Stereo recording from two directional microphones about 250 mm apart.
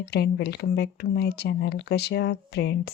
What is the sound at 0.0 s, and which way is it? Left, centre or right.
Speech, left.